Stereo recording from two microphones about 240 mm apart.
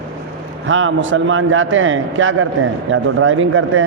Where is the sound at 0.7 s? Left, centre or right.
Right.